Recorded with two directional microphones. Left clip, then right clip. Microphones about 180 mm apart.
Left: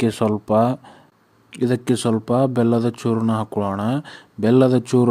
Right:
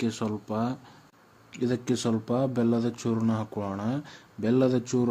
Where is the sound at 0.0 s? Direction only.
40° left (ahead or behind).